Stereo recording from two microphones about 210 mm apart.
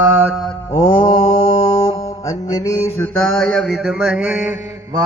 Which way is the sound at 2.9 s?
5° left (ahead or behind).